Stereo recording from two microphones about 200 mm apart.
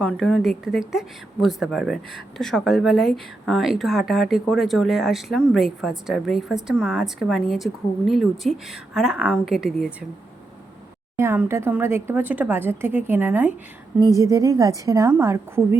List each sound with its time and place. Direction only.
0.0 s a woman's voice: 5° left (ahead or behind)
11.2 s speech: 15° right (ahead or behind)